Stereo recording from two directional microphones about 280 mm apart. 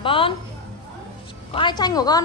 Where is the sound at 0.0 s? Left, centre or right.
Centre.